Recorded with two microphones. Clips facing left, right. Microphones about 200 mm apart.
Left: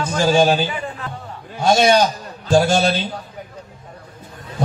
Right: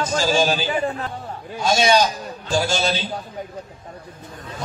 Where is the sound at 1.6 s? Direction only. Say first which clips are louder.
Left 3 dB; 55° left (ahead or behind).